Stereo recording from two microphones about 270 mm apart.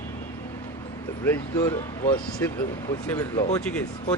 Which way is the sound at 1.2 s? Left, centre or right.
Centre.